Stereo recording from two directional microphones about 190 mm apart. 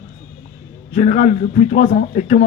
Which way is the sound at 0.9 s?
40° left (ahead or behind).